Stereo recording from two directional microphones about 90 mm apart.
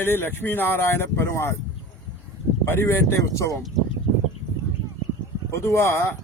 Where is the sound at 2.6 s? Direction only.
25° left (ahead or behind).